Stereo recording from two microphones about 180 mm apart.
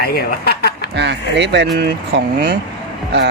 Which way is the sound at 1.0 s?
70° right (ahead or behind).